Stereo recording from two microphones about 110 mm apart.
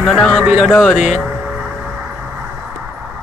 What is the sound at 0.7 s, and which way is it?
Speech, 5° left (ahead or behind).